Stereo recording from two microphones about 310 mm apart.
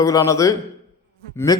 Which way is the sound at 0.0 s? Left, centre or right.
Centre.